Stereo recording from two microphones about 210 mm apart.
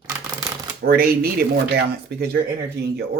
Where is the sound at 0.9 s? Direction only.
45° right (ahead or behind).